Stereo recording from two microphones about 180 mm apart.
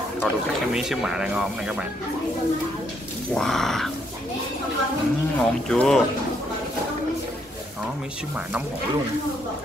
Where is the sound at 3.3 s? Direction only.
Centre (ahead or behind).